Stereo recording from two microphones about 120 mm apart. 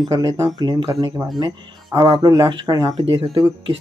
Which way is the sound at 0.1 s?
35° right (ahead or behind).